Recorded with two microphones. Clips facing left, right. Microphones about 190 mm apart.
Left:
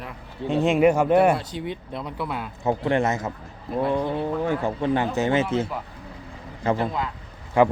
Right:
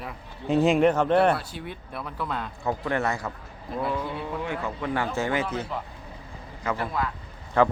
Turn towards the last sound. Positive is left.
turn(degrees=15)  # may be behind; listen again after turning